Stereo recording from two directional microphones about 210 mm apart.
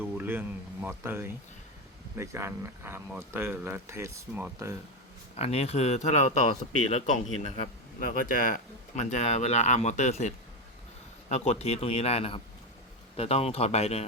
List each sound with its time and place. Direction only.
0.0 s speech: 10° right (ahead or behind)
5.4 s a man's voice: 30° left (ahead or behind)
7.9 s a man's voice: 45° left (ahead or behind)